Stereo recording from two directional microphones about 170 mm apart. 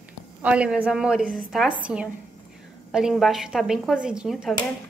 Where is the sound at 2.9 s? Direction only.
5° right (ahead or behind).